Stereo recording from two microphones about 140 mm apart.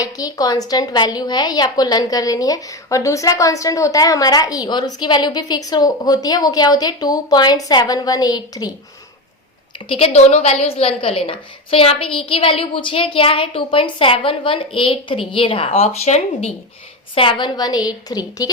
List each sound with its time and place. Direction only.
0.0 s a woman's voice: 25° left (ahead or behind)
9.9 s a woman's voice: 50° left (ahead or behind)
17.2 s a woman's voice: 35° left (ahead or behind)